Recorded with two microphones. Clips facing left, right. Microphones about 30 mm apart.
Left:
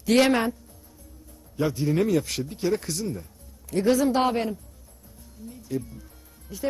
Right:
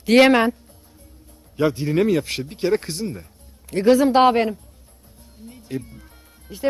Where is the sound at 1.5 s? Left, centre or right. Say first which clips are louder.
Right 4 dB; right.